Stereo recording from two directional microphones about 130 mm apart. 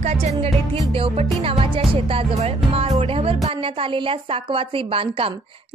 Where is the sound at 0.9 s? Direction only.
45° right (ahead or behind).